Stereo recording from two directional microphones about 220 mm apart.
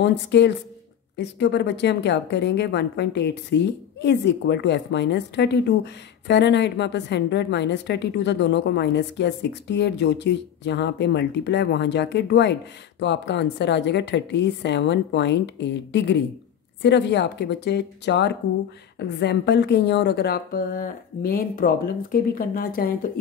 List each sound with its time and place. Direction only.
0.0 s a woman's voice: 55° left (ahead or behind)